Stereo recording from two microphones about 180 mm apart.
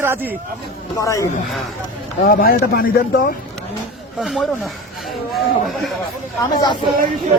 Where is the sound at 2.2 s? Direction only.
55° left (ahead or behind).